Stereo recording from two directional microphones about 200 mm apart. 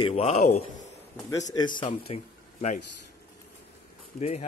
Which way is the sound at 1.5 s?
20° left (ahead or behind).